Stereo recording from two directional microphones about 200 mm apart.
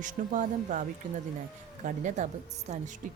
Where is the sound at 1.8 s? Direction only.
40° right (ahead or behind).